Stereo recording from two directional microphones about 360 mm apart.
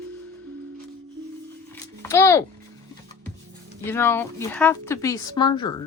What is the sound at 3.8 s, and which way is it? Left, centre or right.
Speech, centre.